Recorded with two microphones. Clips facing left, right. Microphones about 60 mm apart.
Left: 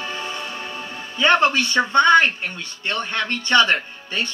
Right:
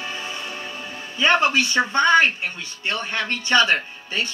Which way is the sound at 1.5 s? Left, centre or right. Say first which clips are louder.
Left 1 dB; centre.